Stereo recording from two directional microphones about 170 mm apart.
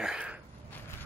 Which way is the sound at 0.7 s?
10° left (ahead or behind).